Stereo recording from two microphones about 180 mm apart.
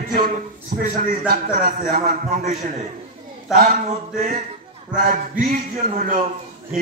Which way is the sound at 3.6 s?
45° right (ahead or behind).